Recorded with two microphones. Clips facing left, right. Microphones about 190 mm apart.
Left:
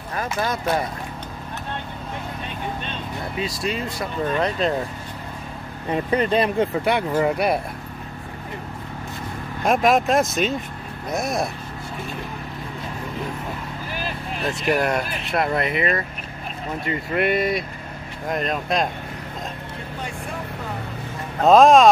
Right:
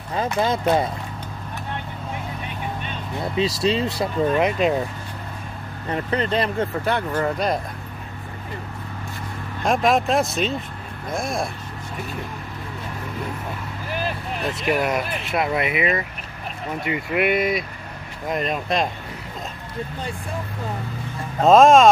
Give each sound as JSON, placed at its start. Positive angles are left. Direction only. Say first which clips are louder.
{"t": 0.1, "sound": "speech", "louder": "right 4 dB", "side_deg": -20}
{"t": 3.3, "sound": "speech", "louder": "right 6 dB", "side_deg": -25}
{"t": 4.3, "sound": "speech", "louder": "right 1 dB", "side_deg": -5}
{"t": 5.9, "sound": "speech", "louder": "left 3 dB", "side_deg": 15}
{"t": 9.6, "sound": "speech", "louder": "left 1 dB", "side_deg": 0}
{"t": 14.5, "sound": "speech", "louder": "left 1 dB", "side_deg": 0}
{"t": 21.5, "sound": "speech", "louder": "even", "side_deg": 0}